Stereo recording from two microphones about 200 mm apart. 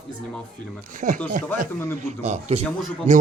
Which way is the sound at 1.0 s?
40° right (ahead or behind).